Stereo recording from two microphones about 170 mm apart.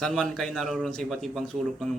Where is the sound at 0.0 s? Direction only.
Centre (ahead or behind).